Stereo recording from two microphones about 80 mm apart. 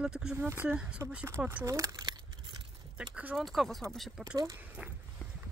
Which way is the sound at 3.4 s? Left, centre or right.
Centre.